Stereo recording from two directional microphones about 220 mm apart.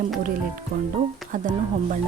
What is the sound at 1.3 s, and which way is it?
Speech, 35° right (ahead or behind).